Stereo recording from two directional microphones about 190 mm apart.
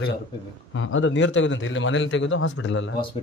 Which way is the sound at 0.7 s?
90° left.